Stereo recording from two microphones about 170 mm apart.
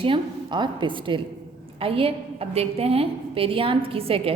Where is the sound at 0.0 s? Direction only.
30° right (ahead or behind).